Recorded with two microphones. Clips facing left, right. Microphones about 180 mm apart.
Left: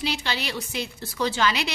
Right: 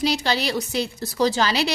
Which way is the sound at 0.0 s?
40° right (ahead or behind).